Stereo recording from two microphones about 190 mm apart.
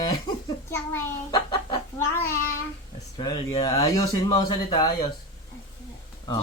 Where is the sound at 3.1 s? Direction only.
25° left (ahead or behind).